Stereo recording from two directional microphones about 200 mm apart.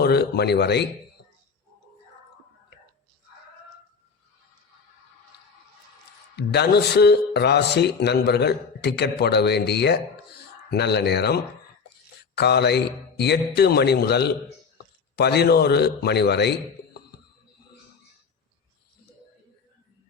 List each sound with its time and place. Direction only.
0.0 s speech: 55° left (ahead or behind)
6.3 s speech: 55° left (ahead or behind)